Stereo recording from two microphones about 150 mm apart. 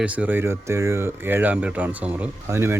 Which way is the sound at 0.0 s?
10° right (ahead or behind).